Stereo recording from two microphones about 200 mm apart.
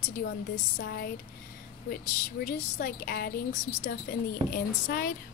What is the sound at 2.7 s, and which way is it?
A woman's voice, 50° left (ahead or behind).